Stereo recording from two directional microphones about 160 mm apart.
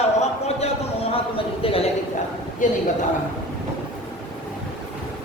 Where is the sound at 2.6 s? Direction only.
55° left (ahead or behind).